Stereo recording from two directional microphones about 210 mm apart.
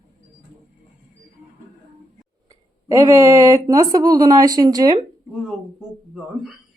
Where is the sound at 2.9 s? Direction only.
15° right (ahead or behind).